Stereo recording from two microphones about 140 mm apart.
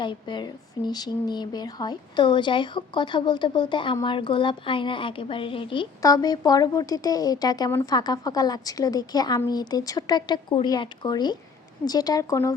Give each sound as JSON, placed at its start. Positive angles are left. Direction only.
{"t": 0.0, "sound": "speech", "side_deg": 35}
{"t": 6.0, "sound": "speech", "side_deg": 25}